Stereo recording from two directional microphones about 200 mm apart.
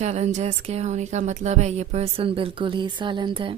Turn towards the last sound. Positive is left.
turn(degrees=-25)  # may be behind; listen again after turning